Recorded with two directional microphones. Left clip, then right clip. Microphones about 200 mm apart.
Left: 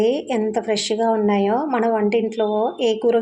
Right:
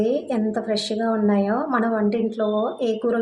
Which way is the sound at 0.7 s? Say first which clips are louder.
Left 4 dB; 25° left (ahead or behind).